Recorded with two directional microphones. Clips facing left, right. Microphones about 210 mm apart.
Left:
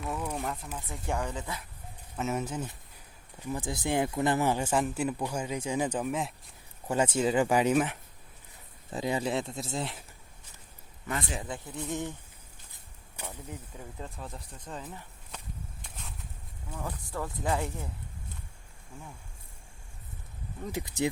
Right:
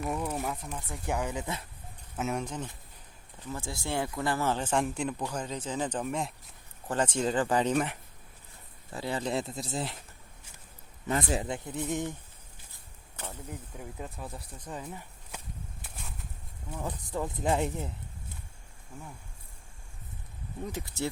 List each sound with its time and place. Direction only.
0.0 s speech: 5° right (ahead or behind)
2.1 s speech: centre (ahead or behind)
8.9 s speech: 15° left (ahead or behind)
9.3 s speech: centre (ahead or behind)
11.3 s speech: 20° right (ahead or behind)
12.7 s a sound: 15° left (ahead or behind)
13.5 s speech: 10° right (ahead or behind)
15.8 s a sound: 5° right (ahead or behind)
16.7 s speech: 20° right (ahead or behind)
20.7 s speech: 15° left (ahead or behind)